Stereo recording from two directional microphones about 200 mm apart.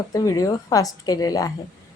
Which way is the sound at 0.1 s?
15° left (ahead or behind).